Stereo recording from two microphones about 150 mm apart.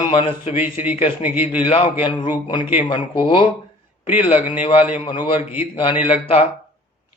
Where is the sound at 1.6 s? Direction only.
35° left (ahead or behind).